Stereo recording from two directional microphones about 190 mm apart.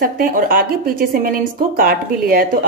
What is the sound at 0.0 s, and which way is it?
Speech, 50° right (ahead or behind).